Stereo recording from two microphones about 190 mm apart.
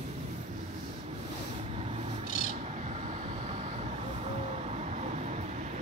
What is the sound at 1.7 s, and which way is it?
Rub, 30° right (ahead or behind).